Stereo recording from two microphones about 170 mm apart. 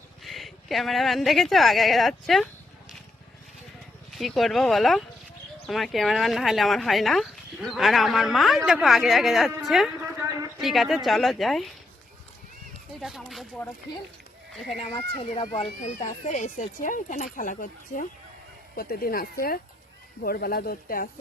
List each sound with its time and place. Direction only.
0.2 s a woman's voice: centre (ahead or behind)
4.1 s speech: centre (ahead or behind)
13.0 s speech: centre (ahead or behind)
14.8 s a child's voice: 35° left (ahead or behind); by 21.1 s 60° left (ahead or behind)